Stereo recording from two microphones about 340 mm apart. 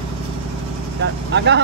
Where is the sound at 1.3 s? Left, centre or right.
Right.